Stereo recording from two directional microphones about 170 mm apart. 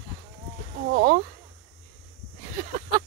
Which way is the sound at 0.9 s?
65° right (ahead or behind).